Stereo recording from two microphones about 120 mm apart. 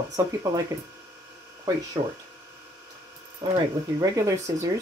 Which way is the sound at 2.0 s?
60° right (ahead or behind).